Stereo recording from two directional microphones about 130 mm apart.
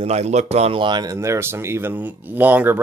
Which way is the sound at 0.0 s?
60° right (ahead or behind).